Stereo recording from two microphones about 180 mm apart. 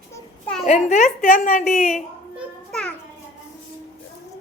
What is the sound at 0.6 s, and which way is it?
A woman's voice, 40° left (ahead or behind).